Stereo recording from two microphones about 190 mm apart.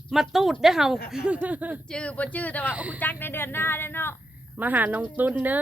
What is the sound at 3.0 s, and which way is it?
Speech, 10° left (ahead or behind).